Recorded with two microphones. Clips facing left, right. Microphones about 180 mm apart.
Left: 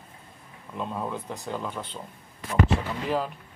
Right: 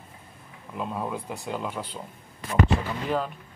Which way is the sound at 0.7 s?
5° right (ahead or behind).